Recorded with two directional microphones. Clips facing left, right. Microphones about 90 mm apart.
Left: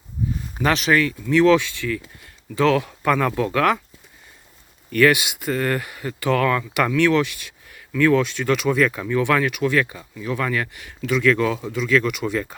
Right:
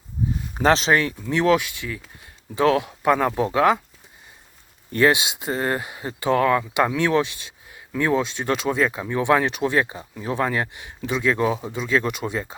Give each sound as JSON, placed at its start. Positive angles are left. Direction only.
{"t": 0.6, "sound": "speech", "side_deg": -30}
{"t": 4.9, "sound": "speech", "side_deg": -25}